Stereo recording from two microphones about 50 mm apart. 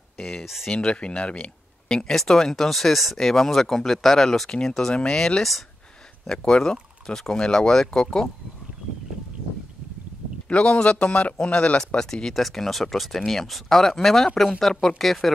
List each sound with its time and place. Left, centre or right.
0.2 s speech: centre
10.5 s speech: left
12.0 s speech: centre